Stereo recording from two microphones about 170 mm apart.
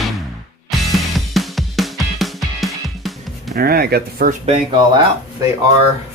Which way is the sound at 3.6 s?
65° right (ahead or behind).